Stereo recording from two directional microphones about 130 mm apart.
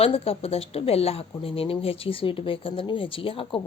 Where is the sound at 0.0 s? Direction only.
50° left (ahead or behind).